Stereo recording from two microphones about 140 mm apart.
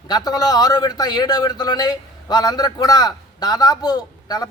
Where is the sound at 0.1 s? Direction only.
30° left (ahead or behind).